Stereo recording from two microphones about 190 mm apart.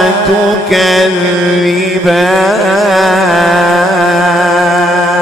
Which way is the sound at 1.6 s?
Centre (ahead or behind).